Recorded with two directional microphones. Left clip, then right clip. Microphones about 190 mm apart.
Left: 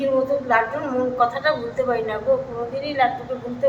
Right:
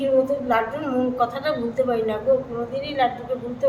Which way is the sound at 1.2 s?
15° right (ahead or behind).